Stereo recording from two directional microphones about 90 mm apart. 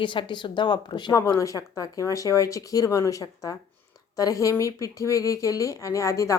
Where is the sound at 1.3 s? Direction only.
40° left (ahead or behind).